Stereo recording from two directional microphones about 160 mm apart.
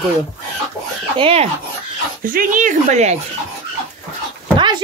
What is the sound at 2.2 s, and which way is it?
Speech, 55° right (ahead or behind).